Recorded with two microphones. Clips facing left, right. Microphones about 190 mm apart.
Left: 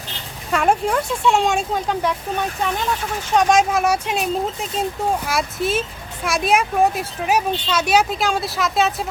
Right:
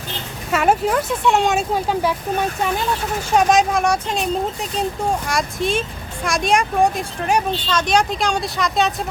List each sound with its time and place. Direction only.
0.5 s speech: 5° right (ahead or behind)
3.3 s speech: centre (ahead or behind)